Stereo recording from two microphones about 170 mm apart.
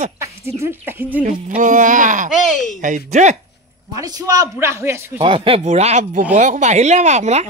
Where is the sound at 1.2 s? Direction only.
50° right (ahead or behind).